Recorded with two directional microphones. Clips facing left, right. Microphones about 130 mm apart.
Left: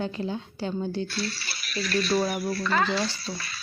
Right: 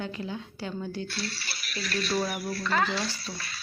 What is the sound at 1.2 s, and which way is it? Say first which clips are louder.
Speech: left 4 dB; 90° left.